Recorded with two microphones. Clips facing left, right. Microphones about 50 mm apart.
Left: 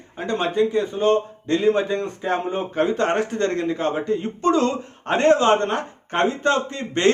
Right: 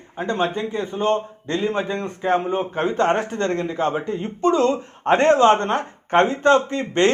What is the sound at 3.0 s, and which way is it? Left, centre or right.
Speech, centre.